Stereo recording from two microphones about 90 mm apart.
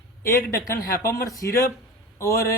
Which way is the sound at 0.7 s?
35° left (ahead or behind).